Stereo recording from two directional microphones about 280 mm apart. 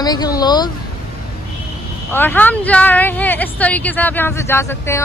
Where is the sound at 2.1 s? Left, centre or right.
Centre.